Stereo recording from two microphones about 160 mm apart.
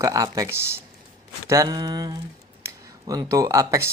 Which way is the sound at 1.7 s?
30° right (ahead or behind).